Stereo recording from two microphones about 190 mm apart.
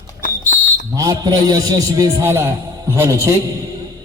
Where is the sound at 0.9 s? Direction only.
20° right (ahead or behind).